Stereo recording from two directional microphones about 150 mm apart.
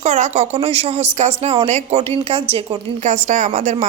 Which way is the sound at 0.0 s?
50° right (ahead or behind).